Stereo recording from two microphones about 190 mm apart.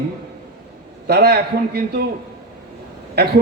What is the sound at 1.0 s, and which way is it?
A man's voice, 55° right (ahead or behind).